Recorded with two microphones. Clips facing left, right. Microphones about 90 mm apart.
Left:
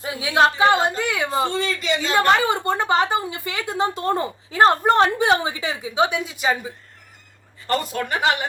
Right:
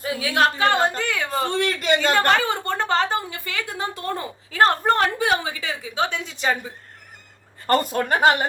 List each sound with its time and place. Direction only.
0.0 s yodeling: 25° left (ahead or behind)
1.5 s a man's voice: 55° right (ahead or behind)
2.3 s a sound: 15° left (ahead or behind)
7.7 s a woman's voice: 45° right (ahead or behind)